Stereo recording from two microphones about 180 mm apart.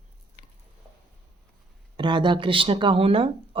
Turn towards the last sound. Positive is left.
turn(degrees=-30)  # may be behind; listen again after turning